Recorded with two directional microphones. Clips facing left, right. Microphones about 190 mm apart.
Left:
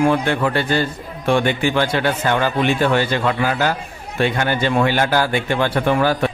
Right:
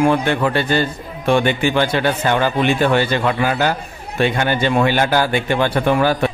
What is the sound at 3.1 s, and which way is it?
Speech, 20° right (ahead or behind).